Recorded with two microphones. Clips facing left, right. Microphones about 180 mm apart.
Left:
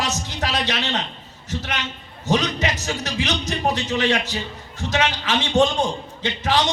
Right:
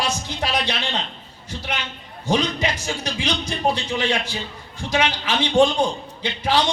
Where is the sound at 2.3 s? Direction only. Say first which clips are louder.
Even; 15° right (ahead or behind).